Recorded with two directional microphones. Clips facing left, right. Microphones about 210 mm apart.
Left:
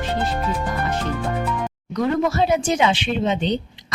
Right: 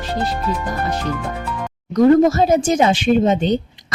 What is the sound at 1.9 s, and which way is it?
Speech, 45° right (ahead or behind).